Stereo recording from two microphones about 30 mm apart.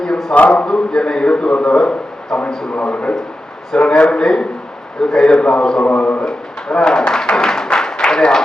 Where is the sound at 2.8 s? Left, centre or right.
Left.